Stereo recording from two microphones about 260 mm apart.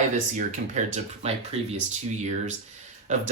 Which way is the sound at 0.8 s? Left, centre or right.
Right.